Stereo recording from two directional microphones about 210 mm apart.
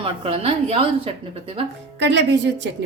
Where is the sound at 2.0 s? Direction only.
55° right (ahead or behind).